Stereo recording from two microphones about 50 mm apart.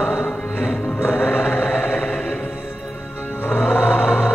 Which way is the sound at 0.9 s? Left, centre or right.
Left.